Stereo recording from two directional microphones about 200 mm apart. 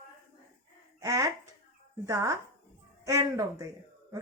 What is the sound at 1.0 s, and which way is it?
Speech, 15° right (ahead or behind).